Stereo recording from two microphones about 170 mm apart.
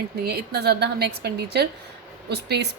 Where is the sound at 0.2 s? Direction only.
70° right (ahead or behind).